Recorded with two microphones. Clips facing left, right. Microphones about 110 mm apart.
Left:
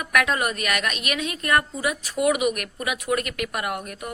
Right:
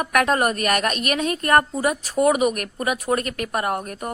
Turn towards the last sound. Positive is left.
turn(degrees=-40)  # may be behind; listen again after turning